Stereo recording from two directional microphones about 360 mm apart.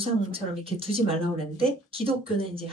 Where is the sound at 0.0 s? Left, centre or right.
Centre.